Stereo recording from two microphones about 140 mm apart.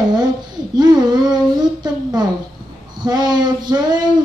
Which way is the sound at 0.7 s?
30° right (ahead or behind).